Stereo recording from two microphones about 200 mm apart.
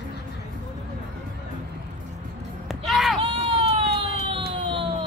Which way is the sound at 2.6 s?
Centre (ahead or behind).